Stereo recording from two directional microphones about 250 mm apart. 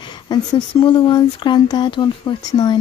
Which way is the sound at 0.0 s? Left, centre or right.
Centre.